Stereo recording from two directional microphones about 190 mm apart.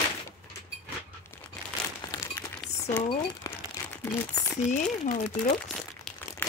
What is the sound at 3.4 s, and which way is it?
Crumpling, 20° left (ahead or behind).